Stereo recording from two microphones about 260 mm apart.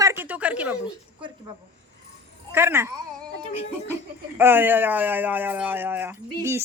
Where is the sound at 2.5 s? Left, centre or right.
Centre.